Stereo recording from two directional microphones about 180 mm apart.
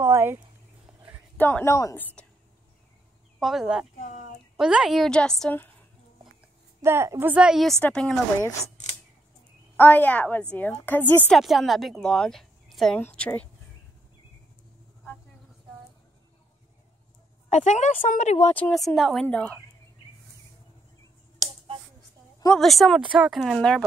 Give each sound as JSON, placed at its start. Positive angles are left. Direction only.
{"t": 0.0, "sound": "a sound", "side_deg": -15}
{"t": 1.3, "sound": "a woman's voice", "side_deg": 10}
{"t": 3.3, "sound": "a woman's voice", "side_deg": 0}
{"t": 6.8, "sound": "a woman's voice", "side_deg": -15}
{"t": 9.8, "sound": "a woman's voice", "side_deg": 10}
{"t": 11.3, "sound": "a woman's voice", "side_deg": 0}
{"t": 17.5, "sound": "a woman's voice", "side_deg": 40}
{"t": 18.5, "sound": "a woman's voice", "side_deg": 5}
{"t": 22.5, "sound": "a woman's voice", "side_deg": 0}